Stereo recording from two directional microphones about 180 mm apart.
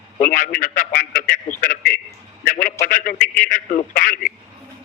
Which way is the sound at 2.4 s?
50° left (ahead or behind).